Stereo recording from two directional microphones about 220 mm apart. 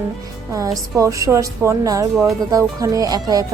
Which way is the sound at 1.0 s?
15° right (ahead or behind).